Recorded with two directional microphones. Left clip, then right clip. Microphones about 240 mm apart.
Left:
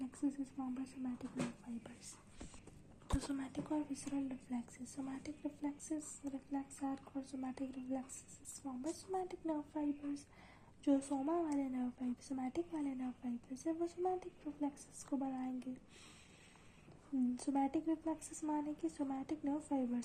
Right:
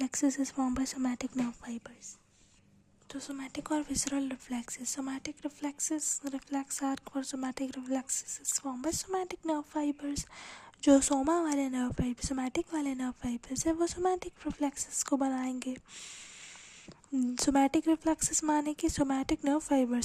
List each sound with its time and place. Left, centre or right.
0.1 s speech: right
3.1 s speech: right
17.3 s speech: right